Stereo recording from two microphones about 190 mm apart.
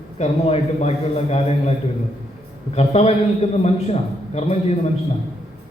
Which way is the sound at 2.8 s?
35° left (ahead or behind).